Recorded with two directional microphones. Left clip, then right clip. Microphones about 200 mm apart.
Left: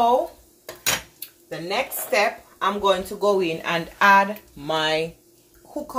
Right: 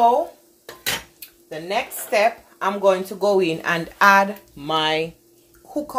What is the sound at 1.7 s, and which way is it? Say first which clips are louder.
Speech: right 1 dB; 30° right (ahead or behind).